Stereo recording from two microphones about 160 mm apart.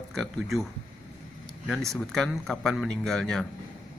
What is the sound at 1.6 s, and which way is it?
Speech, 5° left (ahead or behind).